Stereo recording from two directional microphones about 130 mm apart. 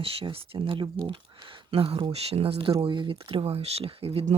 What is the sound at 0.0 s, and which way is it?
Speech, 45° right (ahead or behind).